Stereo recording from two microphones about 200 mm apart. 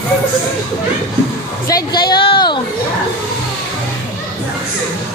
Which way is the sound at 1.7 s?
20° left (ahead or behind).